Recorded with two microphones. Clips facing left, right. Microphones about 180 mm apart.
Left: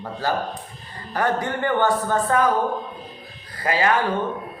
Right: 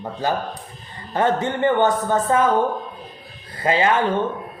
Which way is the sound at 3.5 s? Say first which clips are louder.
Right 2 dB; 25° right (ahead or behind).